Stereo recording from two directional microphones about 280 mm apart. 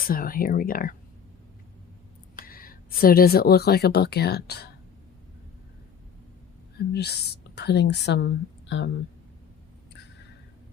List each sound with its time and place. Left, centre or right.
0.0 s speech: left
2.4 s speech: left
6.7 s a woman's voice: left